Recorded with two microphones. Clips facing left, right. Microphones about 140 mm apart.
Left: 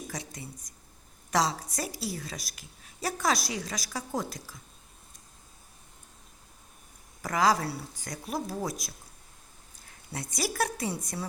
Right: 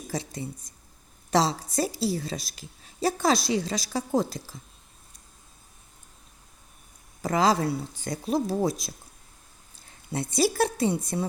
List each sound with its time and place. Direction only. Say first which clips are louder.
0.1 s a woman's voice: right 7 dB; 30° right (ahead or behind)
7.2 s a woman's voice: right 3 dB; 25° right (ahead or behind)
10.1 s a woman's voice: right 9 dB; 25° right (ahead or behind)